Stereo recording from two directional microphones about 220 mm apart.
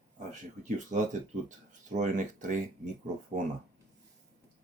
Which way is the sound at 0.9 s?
35° right (ahead or behind).